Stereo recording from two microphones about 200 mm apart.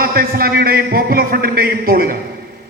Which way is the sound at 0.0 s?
50° right (ahead or behind).